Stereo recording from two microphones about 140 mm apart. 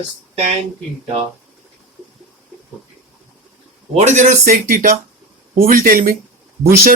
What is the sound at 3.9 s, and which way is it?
Speech, 55° right (ahead or behind).